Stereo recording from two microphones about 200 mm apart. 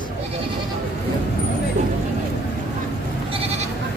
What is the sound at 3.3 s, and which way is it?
Goat, 30° right (ahead or behind).